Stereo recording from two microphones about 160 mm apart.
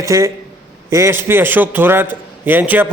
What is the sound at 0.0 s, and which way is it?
A man's voice, 20° right (ahead or behind).